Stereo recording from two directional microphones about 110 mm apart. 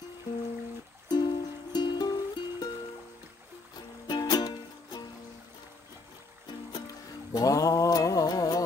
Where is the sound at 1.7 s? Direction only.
40° left (ahead or behind).